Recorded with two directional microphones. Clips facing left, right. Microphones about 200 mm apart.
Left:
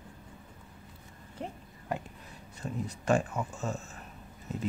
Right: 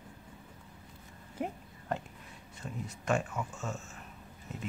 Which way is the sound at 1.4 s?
10° right (ahead or behind).